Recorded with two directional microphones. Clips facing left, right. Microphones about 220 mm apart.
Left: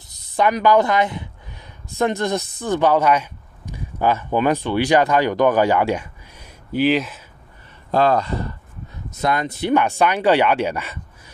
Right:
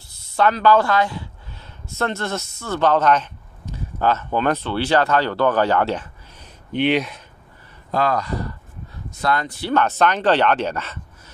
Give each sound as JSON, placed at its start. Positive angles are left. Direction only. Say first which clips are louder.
{"t": 0.4, "sound": "speech", "louder": "even", "side_deg": 15}
{"t": 7.9, "sound": "speech", "louder": "left 4 dB", "side_deg": 30}